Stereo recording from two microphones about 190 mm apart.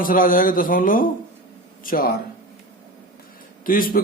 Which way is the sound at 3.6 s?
50° left (ahead or behind).